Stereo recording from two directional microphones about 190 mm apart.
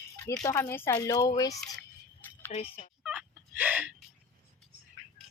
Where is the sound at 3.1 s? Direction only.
5° right (ahead or behind).